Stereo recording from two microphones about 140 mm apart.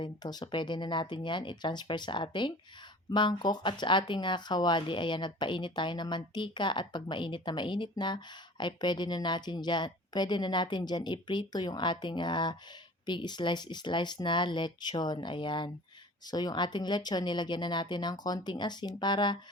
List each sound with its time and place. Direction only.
0.0 s speech: 30° left (ahead or behind)